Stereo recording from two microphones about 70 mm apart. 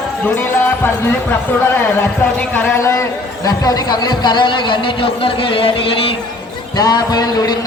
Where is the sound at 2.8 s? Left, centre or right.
Left.